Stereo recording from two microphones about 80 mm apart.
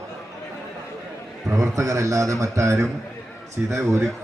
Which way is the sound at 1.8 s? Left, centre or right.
Right.